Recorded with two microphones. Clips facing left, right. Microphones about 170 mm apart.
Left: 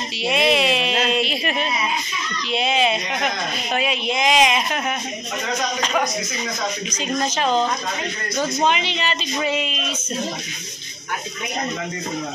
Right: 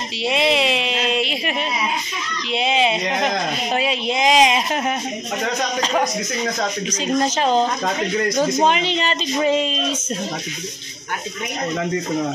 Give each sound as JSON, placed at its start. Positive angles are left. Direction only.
{"t": 0.2, "sound": "a sound", "side_deg": -25}
{"t": 2.5, "sound": "a woman's voice", "side_deg": -20}
{"t": 7.2, "sound": "a woman's voice", "side_deg": -40}